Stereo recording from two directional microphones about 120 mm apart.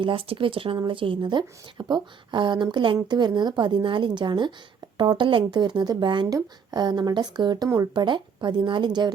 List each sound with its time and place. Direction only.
0.0 s speech: 50° right (ahead or behind)